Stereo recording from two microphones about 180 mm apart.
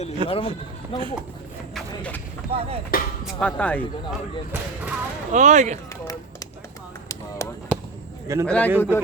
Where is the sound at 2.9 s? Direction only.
50° left (ahead or behind).